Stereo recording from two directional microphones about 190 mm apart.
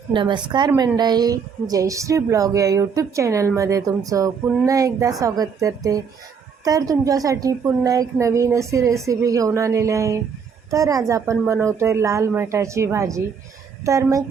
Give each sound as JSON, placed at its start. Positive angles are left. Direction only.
{"t": 0.1, "sound": "a woman's voice", "side_deg": -25}